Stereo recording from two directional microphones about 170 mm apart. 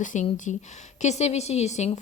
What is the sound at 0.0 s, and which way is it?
A woman's voice, 50° left (ahead or behind).